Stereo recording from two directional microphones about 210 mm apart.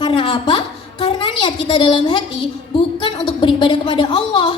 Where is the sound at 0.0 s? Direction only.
25° left (ahead or behind).